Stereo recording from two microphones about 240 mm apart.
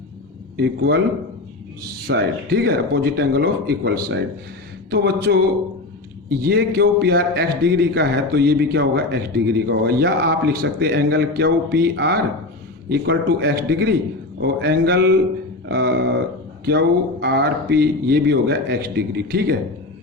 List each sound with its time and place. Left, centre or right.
0.5 s a man's voice: right
2.0 s speech: right
6.4 s a man's voice: right